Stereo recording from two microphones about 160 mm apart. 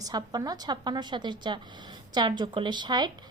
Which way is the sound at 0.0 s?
25° right (ahead or behind).